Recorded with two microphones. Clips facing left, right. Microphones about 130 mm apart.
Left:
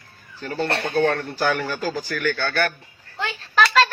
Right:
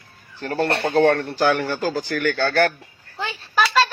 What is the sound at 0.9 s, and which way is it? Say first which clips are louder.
Speech: right 5 dB; 75° right (ahead or behind).